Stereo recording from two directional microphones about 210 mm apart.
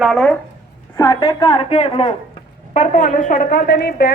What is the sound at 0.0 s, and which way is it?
Speech, centre (ahead or behind).